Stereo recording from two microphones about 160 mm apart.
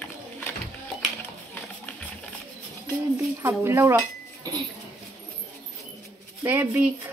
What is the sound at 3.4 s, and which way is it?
Speech, 20° right (ahead or behind).